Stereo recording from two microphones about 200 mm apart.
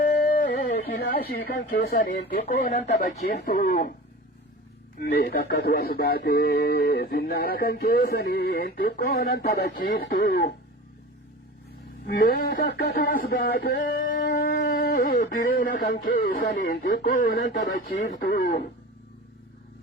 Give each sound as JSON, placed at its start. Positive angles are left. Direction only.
{"t": 0.0, "sound": "a sound", "side_deg": 45}
{"t": 1.5, "sound": "speech", "side_deg": 55}
{"t": 2.4, "sound": "speech", "side_deg": 35}
{"t": 3.2, "sound": "speech", "side_deg": 50}
{"t": 4.9, "sound": "speech", "side_deg": 50}
{"t": 12.0, "sound": "speech", "side_deg": 55}
{"t": 17.1, "sound": "speech", "side_deg": 50}